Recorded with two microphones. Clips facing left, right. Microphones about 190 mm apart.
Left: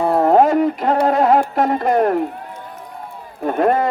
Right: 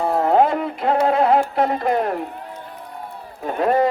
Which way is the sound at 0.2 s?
40° left (ahead or behind).